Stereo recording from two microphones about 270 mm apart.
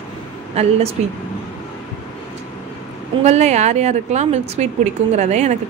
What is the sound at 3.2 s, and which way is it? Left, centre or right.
A woman's voice, right.